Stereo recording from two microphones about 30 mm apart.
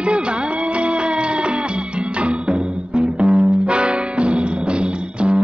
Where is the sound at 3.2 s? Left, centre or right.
Right.